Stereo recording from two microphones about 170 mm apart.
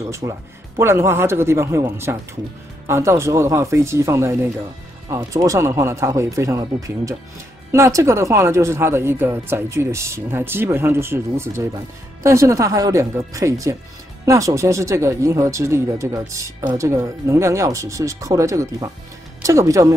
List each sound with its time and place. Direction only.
0.0 s speech: 20° right (ahead or behind)